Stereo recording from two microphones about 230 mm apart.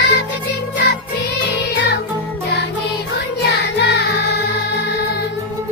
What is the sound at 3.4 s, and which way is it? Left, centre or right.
Music, left.